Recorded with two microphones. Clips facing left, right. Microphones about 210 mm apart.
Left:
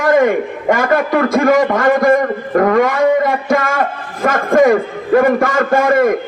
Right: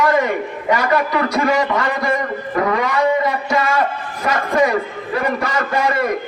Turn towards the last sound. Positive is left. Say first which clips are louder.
# left 7 dB
turn(degrees=50)  # may be behind; listen again after turning